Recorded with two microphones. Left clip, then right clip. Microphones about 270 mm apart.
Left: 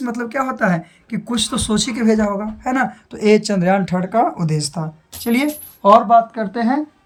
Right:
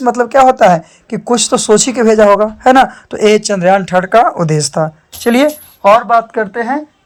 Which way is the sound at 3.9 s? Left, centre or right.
Right.